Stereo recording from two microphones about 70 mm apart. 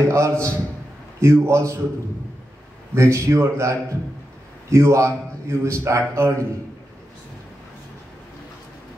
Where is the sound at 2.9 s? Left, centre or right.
Right.